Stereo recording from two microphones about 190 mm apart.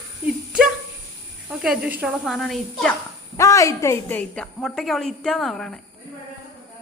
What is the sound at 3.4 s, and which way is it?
A woman's voice, 15° left (ahead or behind).